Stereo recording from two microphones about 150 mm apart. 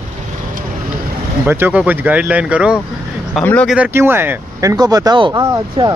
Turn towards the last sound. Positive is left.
turn(degrees=-25)  # may be behind; listen again after turning